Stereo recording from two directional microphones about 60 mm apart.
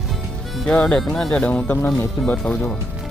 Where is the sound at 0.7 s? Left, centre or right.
Centre.